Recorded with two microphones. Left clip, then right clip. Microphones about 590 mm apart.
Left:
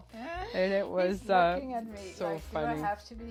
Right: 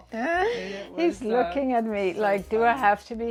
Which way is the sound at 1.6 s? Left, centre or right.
Right.